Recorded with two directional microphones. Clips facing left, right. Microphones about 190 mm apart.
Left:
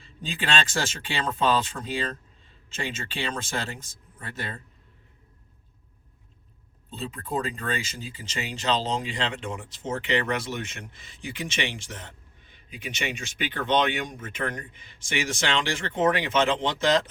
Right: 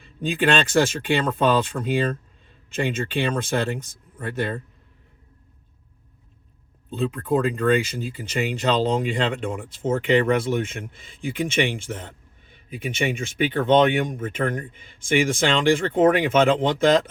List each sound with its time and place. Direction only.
0.0 s speech: 60° right (ahead or behind)
6.9 s speech: 60° right (ahead or behind)